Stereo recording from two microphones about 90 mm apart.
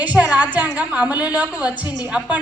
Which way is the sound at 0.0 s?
15° right (ahead or behind).